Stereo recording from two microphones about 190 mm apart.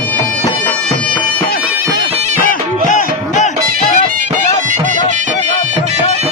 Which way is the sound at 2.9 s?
40° left (ahead or behind).